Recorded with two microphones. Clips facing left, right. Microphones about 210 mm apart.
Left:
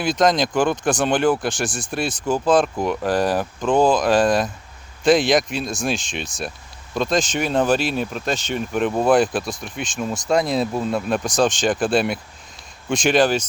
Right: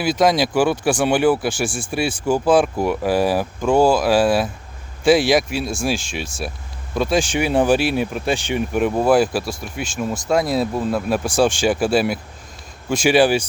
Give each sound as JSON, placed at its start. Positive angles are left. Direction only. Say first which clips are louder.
{"t": 0.0, "sound": "speech", "louder": "right 1 dB", "side_deg": -5}